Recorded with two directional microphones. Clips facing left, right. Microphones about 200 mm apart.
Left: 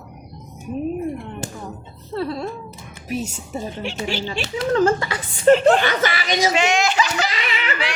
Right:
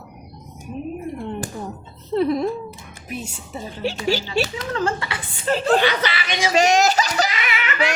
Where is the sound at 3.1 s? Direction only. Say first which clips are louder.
Left 5 dB; 40° left (ahead or behind).